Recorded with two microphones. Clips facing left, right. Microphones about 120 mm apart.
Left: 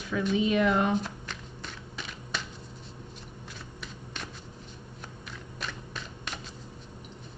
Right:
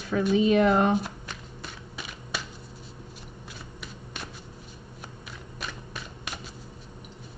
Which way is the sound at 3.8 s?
10° right (ahead or behind).